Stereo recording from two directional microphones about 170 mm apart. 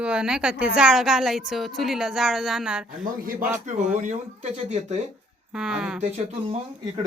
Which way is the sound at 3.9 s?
45° right (ahead or behind).